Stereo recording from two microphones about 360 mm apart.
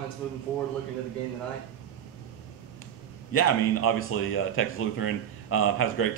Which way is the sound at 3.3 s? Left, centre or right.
Left.